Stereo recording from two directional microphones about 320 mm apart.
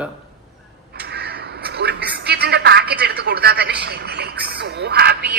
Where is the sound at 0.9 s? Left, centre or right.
Right.